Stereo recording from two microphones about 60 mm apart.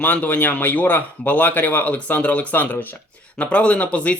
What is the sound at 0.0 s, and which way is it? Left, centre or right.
Speech, left.